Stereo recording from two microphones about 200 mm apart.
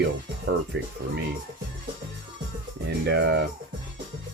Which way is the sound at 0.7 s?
60° right (ahead or behind).